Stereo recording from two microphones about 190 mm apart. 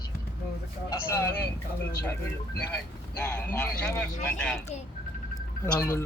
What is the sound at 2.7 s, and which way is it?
Speech, 5° left (ahead or behind).